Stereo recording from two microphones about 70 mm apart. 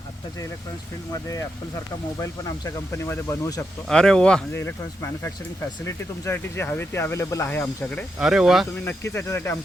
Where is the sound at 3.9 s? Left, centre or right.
Centre.